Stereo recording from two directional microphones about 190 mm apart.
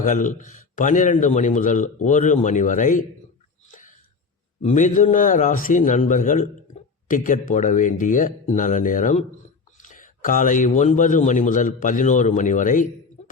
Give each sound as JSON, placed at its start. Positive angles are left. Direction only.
{"t": 0.0, "sound": "a man's voice", "side_deg": 45}
{"t": 3.7, "sound": "a sound", "side_deg": 40}
{"t": 4.6, "sound": "a man's voice", "side_deg": 40}